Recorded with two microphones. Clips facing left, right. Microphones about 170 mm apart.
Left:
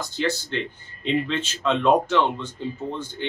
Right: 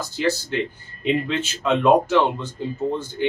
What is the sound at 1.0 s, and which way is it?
Speech, 10° right (ahead or behind).